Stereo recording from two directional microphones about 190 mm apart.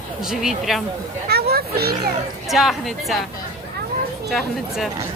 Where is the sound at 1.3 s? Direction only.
55° right (ahead or behind).